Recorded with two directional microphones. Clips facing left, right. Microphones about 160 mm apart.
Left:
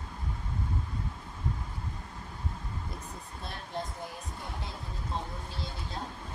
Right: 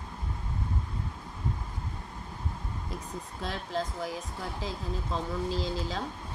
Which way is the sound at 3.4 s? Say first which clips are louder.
Right 5 dB; 90° right.